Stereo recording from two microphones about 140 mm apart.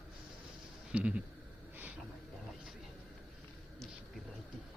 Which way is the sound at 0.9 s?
5° right (ahead or behind).